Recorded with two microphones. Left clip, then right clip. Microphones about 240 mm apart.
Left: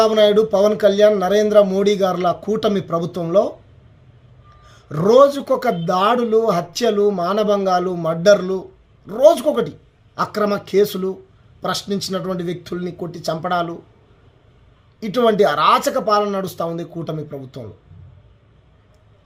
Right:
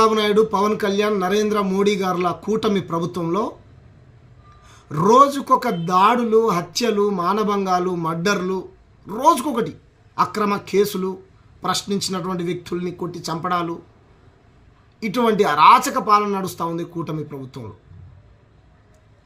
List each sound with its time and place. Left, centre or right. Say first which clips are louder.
0.1 s speech: left 4 dB; centre
5.0 s speech: left 2 dB; centre
15.0 s speech: left 3 dB; centre